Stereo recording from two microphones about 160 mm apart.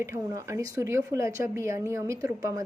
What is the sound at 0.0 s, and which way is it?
Speech, 20° right (ahead or behind).